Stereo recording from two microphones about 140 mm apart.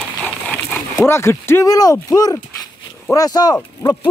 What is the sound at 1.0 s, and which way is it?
Speech, 20° left (ahead or behind).